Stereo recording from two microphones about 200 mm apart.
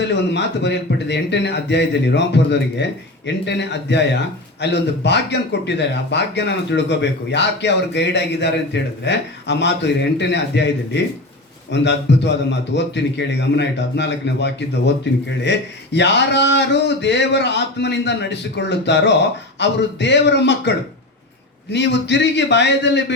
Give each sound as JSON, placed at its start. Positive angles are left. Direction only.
{"t": 0.0, "sound": "speech", "side_deg": 60}